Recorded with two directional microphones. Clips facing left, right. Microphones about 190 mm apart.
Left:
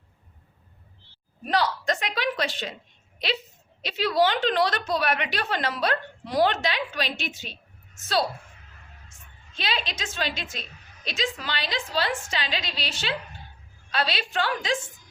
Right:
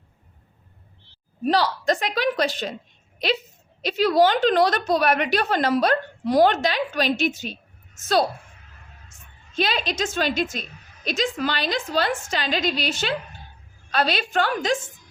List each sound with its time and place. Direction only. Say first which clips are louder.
1.5 s a woman's voice: right 4 dB; 35° right (ahead or behind)
3.8 s a woman's voice: right 5 dB; 45° right (ahead or behind)
9.6 s a woman's voice: right 7 dB; 45° right (ahead or behind)